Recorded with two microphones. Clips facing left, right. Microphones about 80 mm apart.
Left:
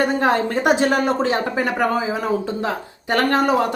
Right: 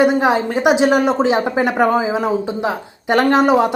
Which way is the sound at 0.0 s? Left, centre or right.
Centre.